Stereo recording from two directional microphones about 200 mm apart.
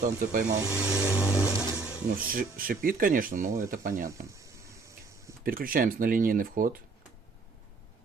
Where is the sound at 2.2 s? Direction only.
45° right (ahead or behind).